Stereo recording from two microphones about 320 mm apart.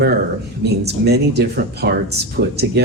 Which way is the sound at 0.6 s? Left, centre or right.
Right.